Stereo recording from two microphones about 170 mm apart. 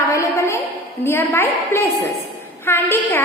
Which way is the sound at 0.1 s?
20° left (ahead or behind).